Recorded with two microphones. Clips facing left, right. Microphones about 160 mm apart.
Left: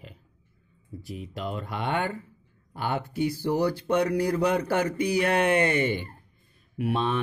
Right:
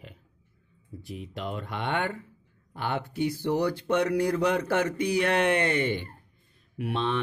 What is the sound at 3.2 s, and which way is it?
Mantra, 5° left (ahead or behind).